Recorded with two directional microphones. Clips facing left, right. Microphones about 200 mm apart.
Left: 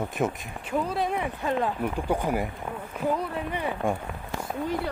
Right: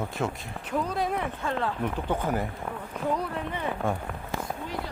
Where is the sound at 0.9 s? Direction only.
Centre (ahead or behind).